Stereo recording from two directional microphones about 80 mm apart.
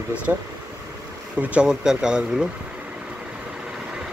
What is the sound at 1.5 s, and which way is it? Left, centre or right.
Speech, centre.